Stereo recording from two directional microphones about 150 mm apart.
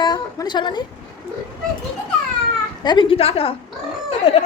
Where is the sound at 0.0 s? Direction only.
30° left (ahead or behind).